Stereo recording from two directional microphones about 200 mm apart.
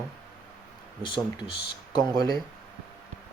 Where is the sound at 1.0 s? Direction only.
25° left (ahead or behind).